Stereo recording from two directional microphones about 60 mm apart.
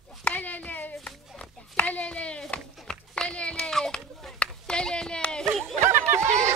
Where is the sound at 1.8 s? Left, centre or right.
Left.